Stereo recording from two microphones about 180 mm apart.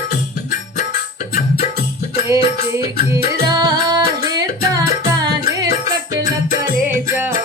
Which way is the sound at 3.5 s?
20° right (ahead or behind).